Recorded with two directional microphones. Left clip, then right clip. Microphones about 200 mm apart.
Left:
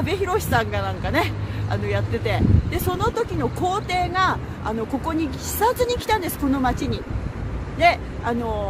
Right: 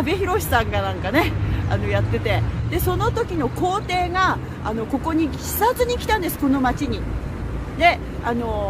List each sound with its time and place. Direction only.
0.0 s speech: 25° left (ahead or behind)